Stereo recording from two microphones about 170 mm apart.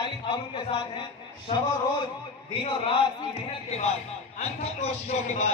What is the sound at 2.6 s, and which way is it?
Speech, 35° left (ahead or behind).